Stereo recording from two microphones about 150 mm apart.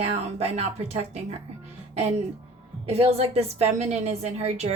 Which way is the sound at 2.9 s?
45° right (ahead or behind).